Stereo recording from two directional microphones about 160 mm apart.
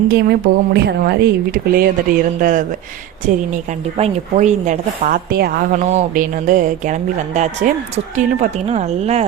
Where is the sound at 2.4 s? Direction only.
55° right (ahead or behind).